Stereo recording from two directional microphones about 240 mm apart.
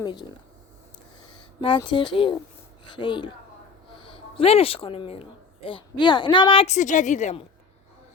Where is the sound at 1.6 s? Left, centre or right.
Left.